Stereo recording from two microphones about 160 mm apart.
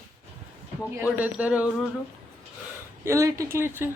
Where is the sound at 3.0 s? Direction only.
20° right (ahead or behind).